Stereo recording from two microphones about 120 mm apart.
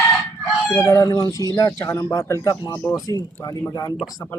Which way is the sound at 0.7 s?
30° left (ahead or behind).